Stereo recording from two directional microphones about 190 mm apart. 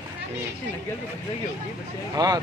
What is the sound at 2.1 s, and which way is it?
Speech, 20° right (ahead or behind).